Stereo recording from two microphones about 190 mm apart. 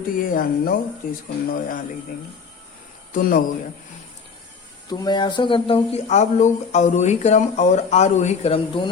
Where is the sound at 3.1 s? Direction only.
45° left (ahead or behind).